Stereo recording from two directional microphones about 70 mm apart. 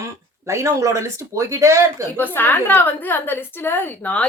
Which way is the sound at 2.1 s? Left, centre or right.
Left.